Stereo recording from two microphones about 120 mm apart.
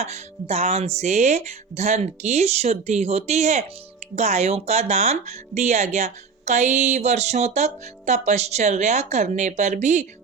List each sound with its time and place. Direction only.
0.0 s speech: 65° right (ahead or behind); by 10.1 s 80° right